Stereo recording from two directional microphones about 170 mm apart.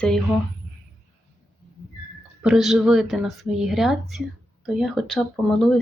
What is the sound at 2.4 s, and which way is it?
Speech, 5° right (ahead or behind).